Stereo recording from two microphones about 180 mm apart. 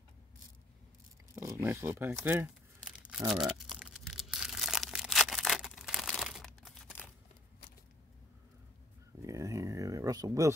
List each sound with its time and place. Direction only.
1.3 s crumpling: 15° right (ahead or behind)
3.3 s tearing: centre (ahead or behind)
9.2 s a sound: 15° right (ahead or behind)